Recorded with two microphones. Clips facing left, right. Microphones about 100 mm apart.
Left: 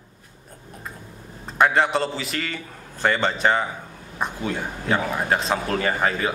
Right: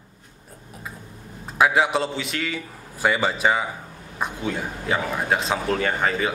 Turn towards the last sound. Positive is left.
turn(degrees=0)  # may be behind; listen again after turning